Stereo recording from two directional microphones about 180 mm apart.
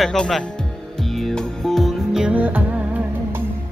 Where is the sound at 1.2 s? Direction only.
Centre (ahead or behind).